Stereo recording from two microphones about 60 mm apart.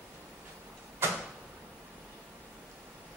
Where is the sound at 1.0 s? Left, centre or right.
Right.